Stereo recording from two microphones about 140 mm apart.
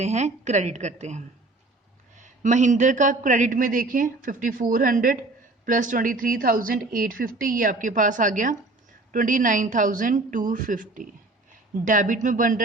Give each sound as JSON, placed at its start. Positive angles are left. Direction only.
{"t": 0.0, "sound": "a woman's voice", "side_deg": -50}